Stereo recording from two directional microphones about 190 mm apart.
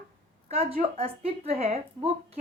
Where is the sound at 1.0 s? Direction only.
30° right (ahead or behind).